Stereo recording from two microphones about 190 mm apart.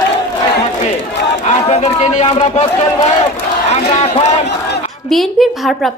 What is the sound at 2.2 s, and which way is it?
Speech, 30° left (ahead or behind).